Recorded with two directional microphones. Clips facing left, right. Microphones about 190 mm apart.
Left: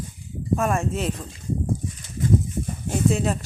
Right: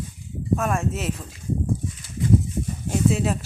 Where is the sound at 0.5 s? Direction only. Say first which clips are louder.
Left 1 dB; centre (ahead or behind).